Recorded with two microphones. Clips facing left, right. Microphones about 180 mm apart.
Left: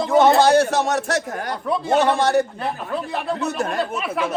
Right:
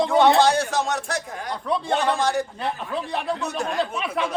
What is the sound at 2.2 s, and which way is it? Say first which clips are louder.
Speech: left 5 dB; 65° left (ahead or behind).